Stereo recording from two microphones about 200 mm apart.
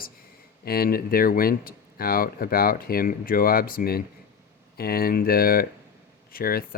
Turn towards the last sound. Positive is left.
turn(degrees=45)  # may be behind; listen again after turning